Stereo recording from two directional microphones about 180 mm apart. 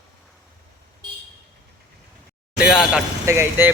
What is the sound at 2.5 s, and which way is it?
Speech, 5° right (ahead or behind).